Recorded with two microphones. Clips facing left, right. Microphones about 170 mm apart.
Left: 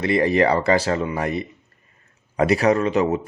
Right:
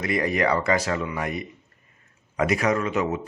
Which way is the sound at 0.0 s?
30° left (ahead or behind).